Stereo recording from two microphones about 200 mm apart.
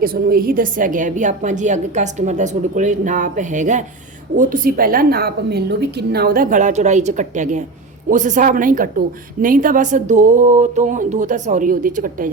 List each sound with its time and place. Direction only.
0.0 s a woman's voice: 45° right (ahead or behind)